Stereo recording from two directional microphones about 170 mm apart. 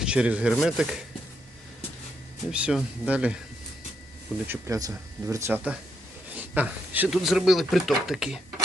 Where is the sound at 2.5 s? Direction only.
5° right (ahead or behind).